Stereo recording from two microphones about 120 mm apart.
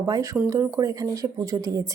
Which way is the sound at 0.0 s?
25° right (ahead or behind).